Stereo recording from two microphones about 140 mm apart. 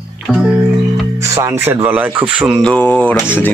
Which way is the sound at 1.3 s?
15° right (ahead or behind).